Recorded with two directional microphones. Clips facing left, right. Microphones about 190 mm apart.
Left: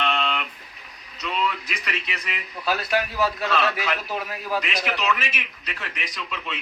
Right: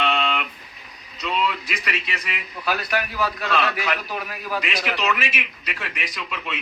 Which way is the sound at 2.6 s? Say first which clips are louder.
Left 1 dB; 25° left (ahead or behind).